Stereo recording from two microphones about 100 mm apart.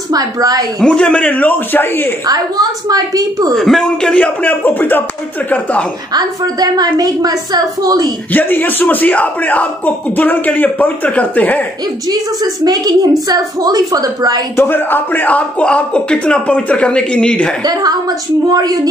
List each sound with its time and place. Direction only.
0.1 s a woman's voice: 40° right (ahead or behind)
0.7 s speech: 10° left (ahead or behind)
2.2 s a woman's voice: 40° right (ahead or behind)
3.5 s speech: centre (ahead or behind)
6.1 s a woman's voice: 40° right (ahead or behind)
8.3 s speech: 20° left (ahead or behind)
12.6 s a woman's voice: 40° right (ahead or behind)
14.6 s speech: 20° left (ahead or behind)
18.5 s a woman's voice: 40° right (ahead or behind)